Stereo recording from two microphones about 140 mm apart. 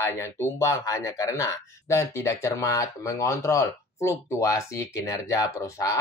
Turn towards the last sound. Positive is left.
turn(degrees=25)  # may be behind; listen again after turning